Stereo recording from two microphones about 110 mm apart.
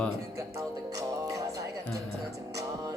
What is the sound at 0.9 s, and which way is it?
Music, 30° right (ahead or behind).